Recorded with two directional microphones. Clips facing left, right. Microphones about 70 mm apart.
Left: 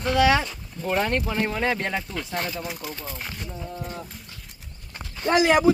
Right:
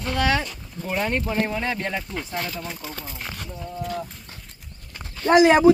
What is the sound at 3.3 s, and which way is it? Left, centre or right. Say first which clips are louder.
Speech: right 1 dB; right.